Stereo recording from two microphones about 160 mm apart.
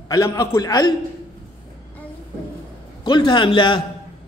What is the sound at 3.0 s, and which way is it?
Speech, 30° left (ahead or behind).